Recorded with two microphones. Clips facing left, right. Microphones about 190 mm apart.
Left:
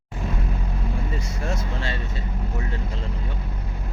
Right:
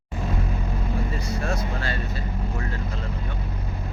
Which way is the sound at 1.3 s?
25° left (ahead or behind).